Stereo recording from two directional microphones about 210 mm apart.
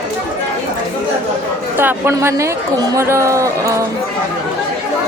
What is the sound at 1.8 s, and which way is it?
Speech, 10° right (ahead or behind).